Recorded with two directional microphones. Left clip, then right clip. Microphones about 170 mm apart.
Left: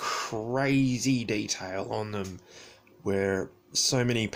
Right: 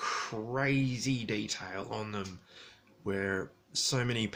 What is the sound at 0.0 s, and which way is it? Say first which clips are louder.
Speech: left 4 dB; 40° left (ahead or behind).